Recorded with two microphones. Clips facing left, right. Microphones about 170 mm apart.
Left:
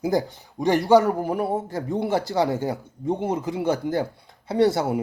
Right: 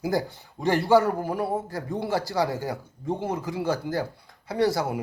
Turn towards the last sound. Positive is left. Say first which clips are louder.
# left 4 dB
turn(degrees=25)  # may be behind; listen again after turning